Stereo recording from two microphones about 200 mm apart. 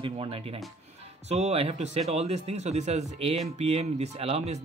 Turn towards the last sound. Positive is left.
turn(degrees=-30)  # may be behind; listen again after turning